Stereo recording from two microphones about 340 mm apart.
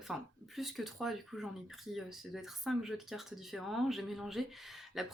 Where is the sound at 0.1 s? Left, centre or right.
Centre.